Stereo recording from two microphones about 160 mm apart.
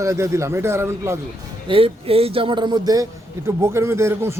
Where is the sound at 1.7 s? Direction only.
35° right (ahead or behind).